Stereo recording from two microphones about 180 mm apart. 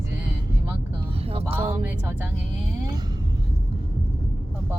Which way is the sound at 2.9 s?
20° right (ahead or behind).